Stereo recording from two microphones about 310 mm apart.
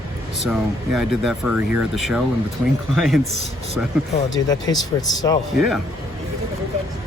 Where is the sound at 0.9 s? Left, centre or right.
Centre.